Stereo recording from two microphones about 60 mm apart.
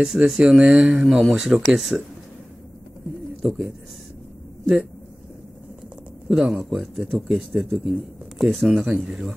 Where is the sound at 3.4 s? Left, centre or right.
Centre.